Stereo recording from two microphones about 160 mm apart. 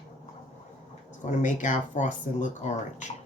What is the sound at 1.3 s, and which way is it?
Speech, 50° left (ahead or behind).